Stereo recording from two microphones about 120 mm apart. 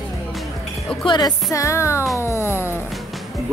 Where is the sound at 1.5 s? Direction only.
25° left (ahead or behind).